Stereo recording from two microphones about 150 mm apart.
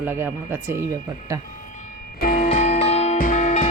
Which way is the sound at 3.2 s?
65° left (ahead or behind).